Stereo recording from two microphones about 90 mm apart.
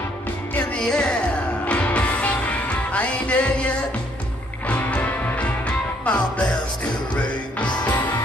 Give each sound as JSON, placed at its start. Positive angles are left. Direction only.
{"t": 0.7, "sound": "music", "side_deg": 10}